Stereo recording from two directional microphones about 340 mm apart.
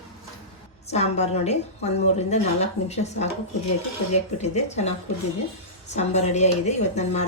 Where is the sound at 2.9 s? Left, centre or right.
Centre.